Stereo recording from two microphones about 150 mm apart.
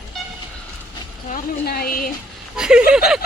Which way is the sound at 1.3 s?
85° left.